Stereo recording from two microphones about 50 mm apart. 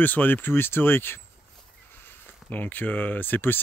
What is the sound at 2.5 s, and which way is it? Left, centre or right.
Speech, left.